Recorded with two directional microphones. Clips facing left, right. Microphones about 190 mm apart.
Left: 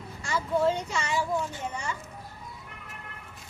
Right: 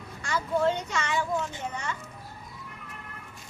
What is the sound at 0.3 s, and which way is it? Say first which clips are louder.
Speech: even; 5° left (ahead or behind).